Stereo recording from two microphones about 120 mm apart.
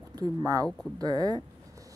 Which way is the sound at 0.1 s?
30° right (ahead or behind).